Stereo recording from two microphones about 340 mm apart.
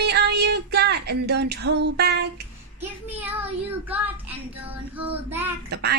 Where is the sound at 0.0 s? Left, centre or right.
Right.